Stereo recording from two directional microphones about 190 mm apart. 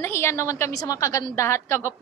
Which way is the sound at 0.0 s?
15° left (ahead or behind).